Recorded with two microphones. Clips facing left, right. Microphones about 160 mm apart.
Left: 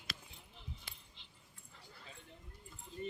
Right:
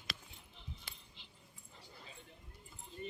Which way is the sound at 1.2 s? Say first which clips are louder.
Right 3 dB; 5° right (ahead or behind).